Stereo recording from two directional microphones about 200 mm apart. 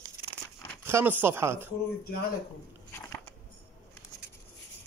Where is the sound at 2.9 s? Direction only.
10° left (ahead or behind).